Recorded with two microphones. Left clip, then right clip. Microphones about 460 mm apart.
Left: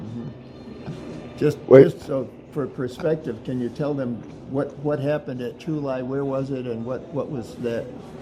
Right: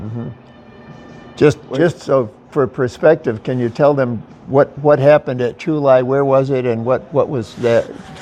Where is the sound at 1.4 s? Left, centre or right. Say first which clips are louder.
Even; right.